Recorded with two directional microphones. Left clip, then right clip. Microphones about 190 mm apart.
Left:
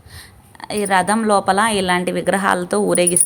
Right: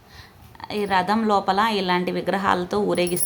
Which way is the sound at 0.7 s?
20° left (ahead or behind).